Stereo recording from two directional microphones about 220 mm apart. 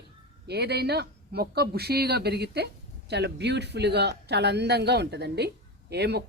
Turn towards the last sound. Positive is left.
turn(degrees=-50)  # may be behind; listen again after turning